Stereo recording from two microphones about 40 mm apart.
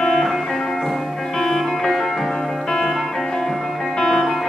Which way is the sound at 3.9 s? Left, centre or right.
Centre.